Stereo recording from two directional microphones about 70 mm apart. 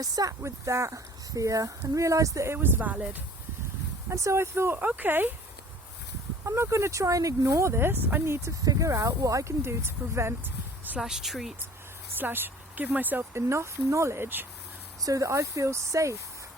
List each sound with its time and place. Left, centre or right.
0.0 s speech: right
0.4 s speech: right
2.5 s speech: right
4.1 s speech: right
4.8 s speech: right
6.4 s speech: right
8.6 s speech: right
11.0 s speech: centre
12.1 s speech: right
13.3 s speech: right
15.0 s speech: right